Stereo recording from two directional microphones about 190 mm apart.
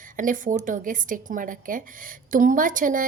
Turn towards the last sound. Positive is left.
turn(degrees=-45)  # may be behind; listen again after turning